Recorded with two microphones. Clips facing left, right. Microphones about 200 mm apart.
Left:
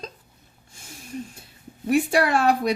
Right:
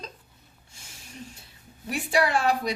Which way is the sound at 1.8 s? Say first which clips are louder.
Left 5 dB; 55° left (ahead or behind).